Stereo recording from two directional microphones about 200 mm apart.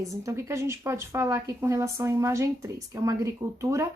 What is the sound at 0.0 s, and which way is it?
A woman's voice, 15° right (ahead or behind).